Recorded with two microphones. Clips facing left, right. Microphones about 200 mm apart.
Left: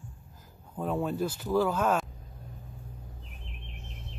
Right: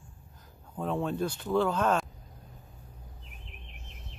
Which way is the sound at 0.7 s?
5° left (ahead or behind).